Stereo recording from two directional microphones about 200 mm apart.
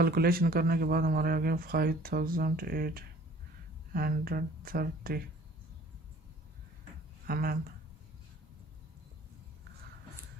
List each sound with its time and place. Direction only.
0.0 s speech: 50° right (ahead or behind)
7.2 s speech: 50° right (ahead or behind)